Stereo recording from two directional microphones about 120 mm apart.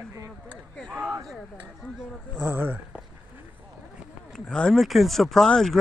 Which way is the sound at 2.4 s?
15° right (ahead or behind).